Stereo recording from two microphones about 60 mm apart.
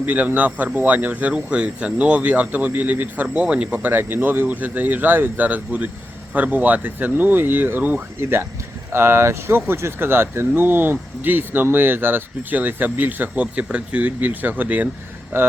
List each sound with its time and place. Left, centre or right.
0.0 s speech: right
3.3 s speech: centre
3.9 s speech: right
8.2 s speech: right
15.3 s speech: right